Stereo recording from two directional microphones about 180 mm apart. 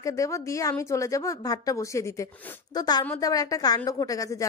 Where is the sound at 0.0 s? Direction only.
15° left (ahead or behind).